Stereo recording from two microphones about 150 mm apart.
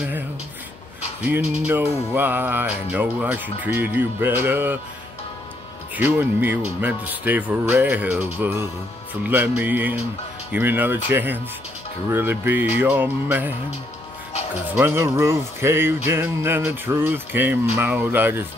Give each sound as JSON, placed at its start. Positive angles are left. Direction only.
{"t": 1.2, "sound": "speech", "side_deg": -10}
{"t": 5.9, "sound": "speech", "side_deg": -10}
{"t": 14.8, "sound": "speech", "side_deg": -15}